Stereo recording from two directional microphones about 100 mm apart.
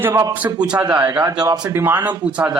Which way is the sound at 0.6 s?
10° right (ahead or behind).